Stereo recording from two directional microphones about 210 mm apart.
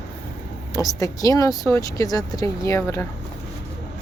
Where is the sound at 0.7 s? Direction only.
15° left (ahead or behind).